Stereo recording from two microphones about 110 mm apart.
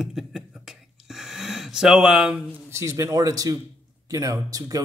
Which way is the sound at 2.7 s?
25° right (ahead or behind).